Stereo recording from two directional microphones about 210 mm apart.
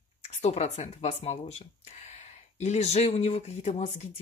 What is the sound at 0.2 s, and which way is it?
Speech, 30° left (ahead or behind).